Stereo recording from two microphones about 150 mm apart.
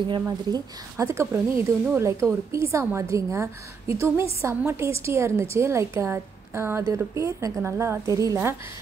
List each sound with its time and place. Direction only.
0.1 s a woman's voice: 25° right (ahead or behind)